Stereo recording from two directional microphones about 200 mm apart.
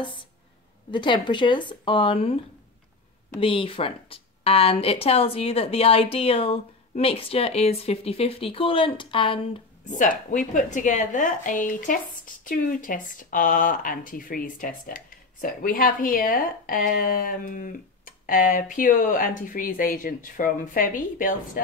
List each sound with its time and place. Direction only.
0.0 s speech: 25° left (ahead or behind)
3.3 s speech: 25° left (ahead or behind)
9.8 s speech: 40° left (ahead or behind)